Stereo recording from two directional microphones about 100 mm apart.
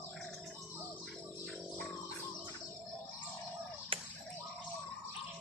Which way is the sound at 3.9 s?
65° right (ahead or behind).